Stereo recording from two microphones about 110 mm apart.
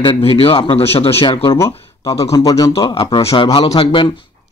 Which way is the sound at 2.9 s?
55° left (ahead or behind).